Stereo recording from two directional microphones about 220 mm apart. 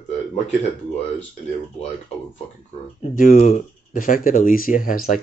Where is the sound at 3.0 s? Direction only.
35° left (ahead or behind).